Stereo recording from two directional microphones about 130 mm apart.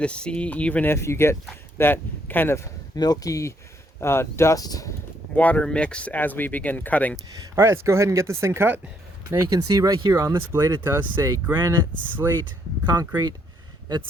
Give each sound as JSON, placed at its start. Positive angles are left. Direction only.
{"t": 0.0, "sound": "speech", "side_deg": 10}
{"t": 2.9, "sound": "speech", "side_deg": 30}
{"t": 5.3, "sound": "speech", "side_deg": 10}
{"t": 7.5, "sound": "speech", "side_deg": -20}
{"t": 12.8, "sound": "speech", "side_deg": -30}